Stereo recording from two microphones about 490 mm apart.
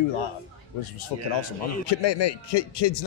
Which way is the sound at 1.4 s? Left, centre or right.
Left.